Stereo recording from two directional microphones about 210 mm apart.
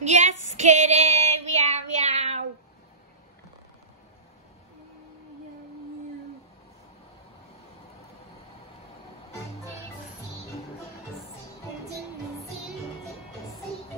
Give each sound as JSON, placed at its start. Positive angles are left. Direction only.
{"t": 0.0, "sound": "child singing", "side_deg": -35}